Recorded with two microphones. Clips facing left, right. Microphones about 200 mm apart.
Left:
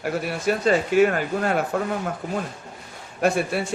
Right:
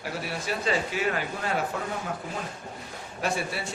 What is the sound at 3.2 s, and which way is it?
Speech, 55° left (ahead or behind).